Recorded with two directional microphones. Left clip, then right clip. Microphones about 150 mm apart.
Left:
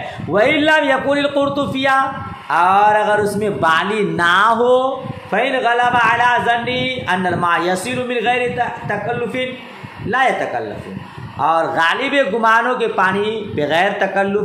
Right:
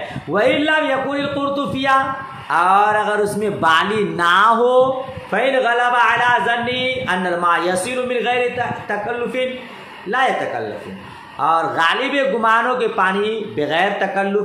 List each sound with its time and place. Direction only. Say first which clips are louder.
0.3 s a man's voice: left 2 dB; 30° left (ahead or behind)
0.6 s a man's voice: left 3 dB; 45° left (ahead or behind); by 10.3 s 20° left (ahead or behind)
11.3 s a man's voice: left 1 dB; 20° left (ahead or behind)